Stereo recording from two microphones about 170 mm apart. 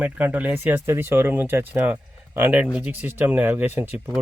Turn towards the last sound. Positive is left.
turn(degrees=-10)  # may be behind; listen again after turning